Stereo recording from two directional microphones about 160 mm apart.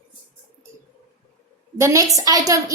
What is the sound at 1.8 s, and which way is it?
Speech, 20° right (ahead or behind).